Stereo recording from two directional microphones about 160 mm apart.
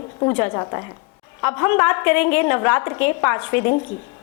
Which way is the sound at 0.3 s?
20° left (ahead or behind).